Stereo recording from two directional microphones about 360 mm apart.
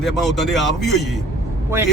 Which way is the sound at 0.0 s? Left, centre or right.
Centre.